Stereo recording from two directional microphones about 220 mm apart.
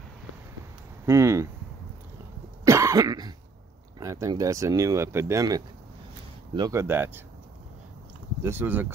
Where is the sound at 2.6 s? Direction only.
15° right (ahead or behind).